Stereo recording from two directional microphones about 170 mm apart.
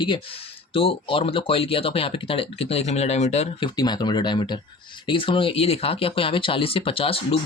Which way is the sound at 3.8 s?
25° left (ahead or behind).